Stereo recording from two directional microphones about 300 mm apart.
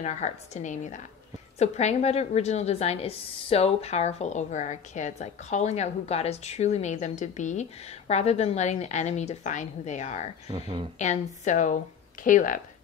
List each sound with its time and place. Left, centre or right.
0.0 s a woman's voice: left
10.5 s speech: centre
11.0 s a woman's voice: left